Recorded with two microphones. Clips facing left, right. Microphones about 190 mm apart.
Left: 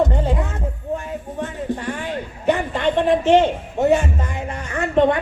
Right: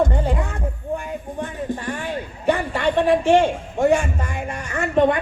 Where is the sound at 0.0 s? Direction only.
20° left (ahead or behind).